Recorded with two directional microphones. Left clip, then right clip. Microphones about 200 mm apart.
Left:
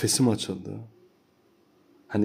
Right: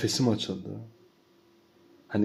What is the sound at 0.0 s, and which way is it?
Speech, 30° left (ahead or behind).